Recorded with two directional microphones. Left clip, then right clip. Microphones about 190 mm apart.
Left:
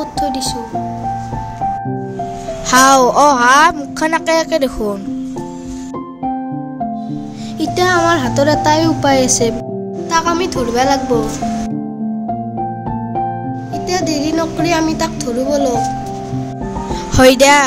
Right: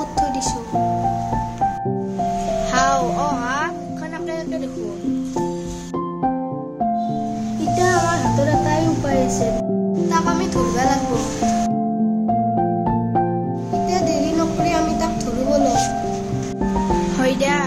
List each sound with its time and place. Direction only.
2.7 s a sound: 60° left (ahead or behind)
7.7 s speech: 55° left (ahead or behind)
10.0 s speech: 35° left (ahead or behind)
13.8 s music: 45° left (ahead or behind)
17.2 s speech: 60° left (ahead or behind)